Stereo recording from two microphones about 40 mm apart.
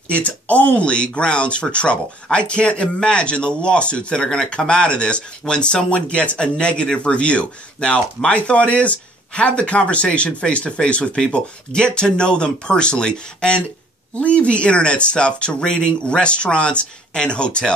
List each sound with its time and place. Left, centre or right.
0.1 s speech: left